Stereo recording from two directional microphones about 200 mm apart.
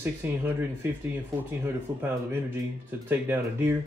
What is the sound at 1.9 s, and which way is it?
Speech, 15° right (ahead or behind).